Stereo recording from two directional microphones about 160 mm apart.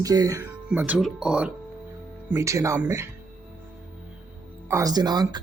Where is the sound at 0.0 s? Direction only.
20° right (ahead or behind).